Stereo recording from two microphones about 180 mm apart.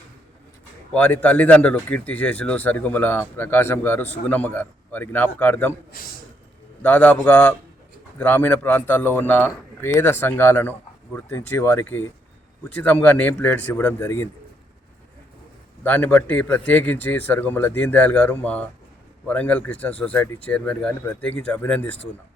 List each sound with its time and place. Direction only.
0.9 s speech: 10° left (ahead or behind)
6.8 s speech: 10° left (ahead or behind)
15.8 s speech: 10° left (ahead or behind)